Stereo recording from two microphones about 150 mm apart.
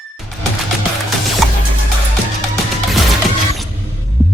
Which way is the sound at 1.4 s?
Centre (ahead or behind).